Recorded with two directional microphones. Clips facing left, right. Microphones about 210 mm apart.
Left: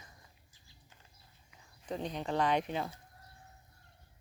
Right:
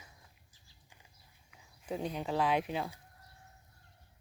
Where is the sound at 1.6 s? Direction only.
5° right (ahead or behind).